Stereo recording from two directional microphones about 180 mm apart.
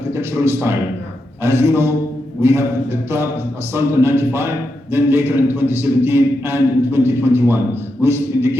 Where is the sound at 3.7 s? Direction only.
15° right (ahead or behind).